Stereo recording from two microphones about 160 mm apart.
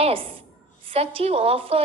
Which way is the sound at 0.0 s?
35° right (ahead or behind).